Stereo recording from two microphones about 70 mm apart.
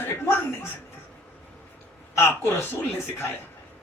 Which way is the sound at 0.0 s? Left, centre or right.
Left.